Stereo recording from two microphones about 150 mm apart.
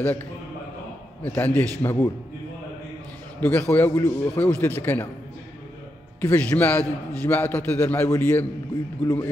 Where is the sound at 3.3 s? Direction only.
10° left (ahead or behind).